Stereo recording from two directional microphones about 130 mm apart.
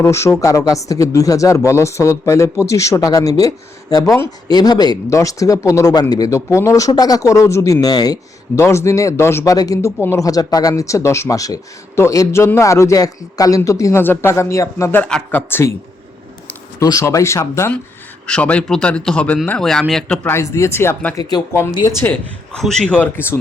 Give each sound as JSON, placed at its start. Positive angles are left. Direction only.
{"t": 0.0, "sound": "speech", "side_deg": 20}
{"t": 16.8, "sound": "speech", "side_deg": 25}
{"t": 18.3, "sound": "a man's voice", "side_deg": 10}
{"t": 20.2, "sound": "speech", "side_deg": 20}
{"t": 21.2, "sound": "speech", "side_deg": 30}
{"t": 22.5, "sound": "speech", "side_deg": 5}